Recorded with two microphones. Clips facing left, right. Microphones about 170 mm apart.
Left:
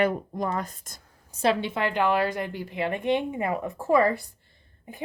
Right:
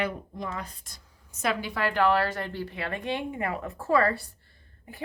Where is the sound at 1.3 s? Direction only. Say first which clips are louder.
Left 5 dB; 30° left (ahead or behind).